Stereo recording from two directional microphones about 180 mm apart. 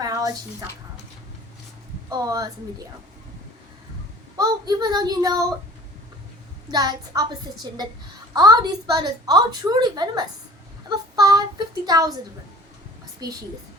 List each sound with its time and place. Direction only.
0.0 s a sound: 20° right (ahead or behind)
2.0 s a woman's voice: 20° right (ahead or behind)
4.4 s a woman's voice: 20° right (ahead or behind)
6.7 s a woman's voice: 20° right (ahead or behind)
13.2 s a woman's voice: 20° right (ahead or behind)